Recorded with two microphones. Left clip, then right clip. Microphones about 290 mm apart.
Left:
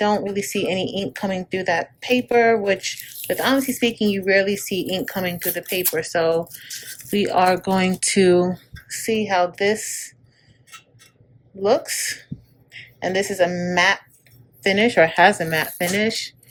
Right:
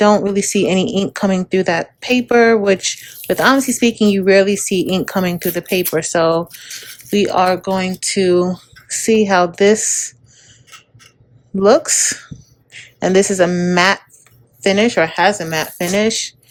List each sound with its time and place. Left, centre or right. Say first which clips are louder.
0.0 s speech: right 8 dB; centre
11.6 s speech: right 8 dB; centre